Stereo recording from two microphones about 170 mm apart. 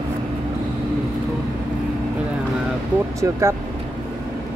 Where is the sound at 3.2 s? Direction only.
15° right (ahead or behind).